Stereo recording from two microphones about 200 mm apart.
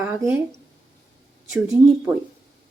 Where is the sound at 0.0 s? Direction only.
10° right (ahead or behind).